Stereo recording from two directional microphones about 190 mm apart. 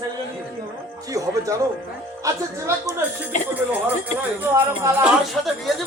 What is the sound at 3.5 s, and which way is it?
Speech, 10° right (ahead or behind).